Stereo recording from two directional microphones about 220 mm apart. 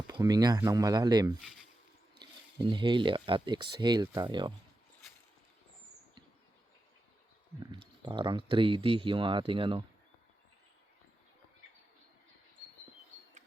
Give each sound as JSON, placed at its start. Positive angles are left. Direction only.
{"t": 0.1, "sound": "speech", "side_deg": -20}
{"t": 7.7, "sound": "speech", "side_deg": -20}